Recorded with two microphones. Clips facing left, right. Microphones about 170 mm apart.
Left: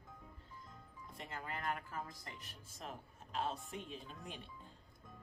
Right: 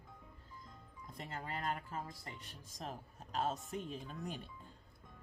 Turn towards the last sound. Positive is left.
turn(degrees=-40)  # may be behind; listen again after turning